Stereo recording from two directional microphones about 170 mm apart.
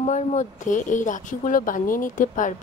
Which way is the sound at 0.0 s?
45° left (ahead or behind).